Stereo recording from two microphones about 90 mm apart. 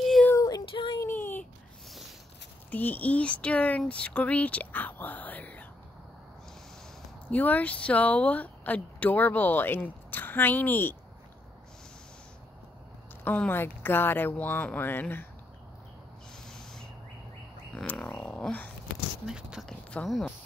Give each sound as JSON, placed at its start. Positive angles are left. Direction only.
{"t": 0.4, "sound": "a sound", "side_deg": 40}
{"t": 0.7, "sound": "a sound", "side_deg": 65}
{"t": 1.0, "sound": "a sound", "side_deg": 25}
{"t": 2.7, "sound": "speech", "side_deg": 20}
{"t": 7.2, "sound": "speech", "side_deg": 20}
{"t": 13.2, "sound": "speech", "side_deg": 20}
{"t": 16.4, "sound": "owl", "side_deg": 5}
{"t": 18.0, "sound": "speech", "side_deg": 15}
{"t": 19.2, "sound": "speech", "side_deg": -5}